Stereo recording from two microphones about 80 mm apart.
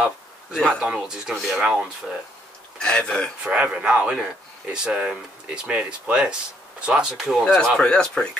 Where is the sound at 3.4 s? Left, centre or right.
Centre.